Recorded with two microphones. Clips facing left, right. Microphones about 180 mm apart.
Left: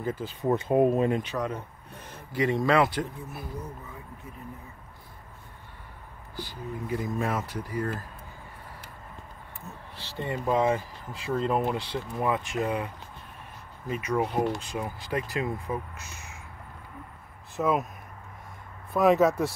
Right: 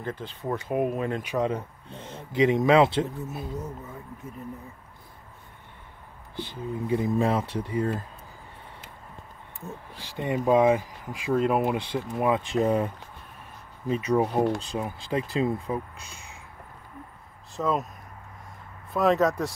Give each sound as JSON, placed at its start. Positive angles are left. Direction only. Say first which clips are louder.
{"t": 0.0, "sound": "speech", "louder": "left 3 dB", "side_deg": 5}
{"t": 0.5, "sound": "speech", "louder": "left 4 dB", "side_deg": 25}
{"t": 1.4, "sound": "speech", "louder": "right 5 dB", "side_deg": -25}
{"t": 6.3, "sound": "speech", "louder": "right 4 dB", "side_deg": -25}
{"t": 9.9, "sound": "speech", "louder": "right 4 dB", "side_deg": -15}
{"t": 12.4, "sound": "speech", "louder": "right 5 dB", "side_deg": -40}
{"t": 13.8, "sound": "speech", "louder": "right 4 dB", "side_deg": -30}
{"t": 17.6, "sound": "speech", "louder": "left 1 dB", "side_deg": 5}
{"t": 18.9, "sound": "speech", "louder": "left 1 dB", "side_deg": 5}